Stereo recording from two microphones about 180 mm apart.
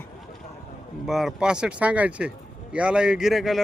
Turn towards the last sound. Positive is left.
turn(degrees=0)  # may be behind; listen again after turning